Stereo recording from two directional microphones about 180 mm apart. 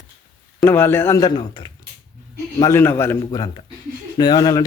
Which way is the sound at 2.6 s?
15° left (ahead or behind).